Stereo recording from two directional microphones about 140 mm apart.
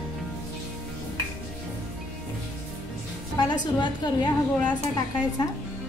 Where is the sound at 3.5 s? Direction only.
30° left (ahead or behind).